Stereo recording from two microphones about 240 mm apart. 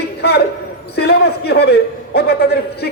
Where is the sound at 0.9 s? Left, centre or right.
Left.